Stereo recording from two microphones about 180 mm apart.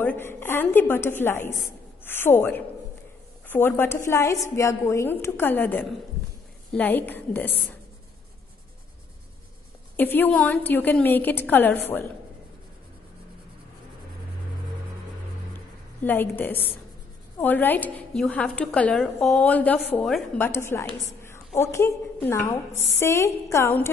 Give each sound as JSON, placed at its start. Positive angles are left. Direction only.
{"t": 0.0, "sound": "a woman's voice", "side_deg": 10}
{"t": 9.9, "sound": "a woman's voice", "side_deg": 10}
{"t": 16.0, "sound": "a woman's voice", "side_deg": 10}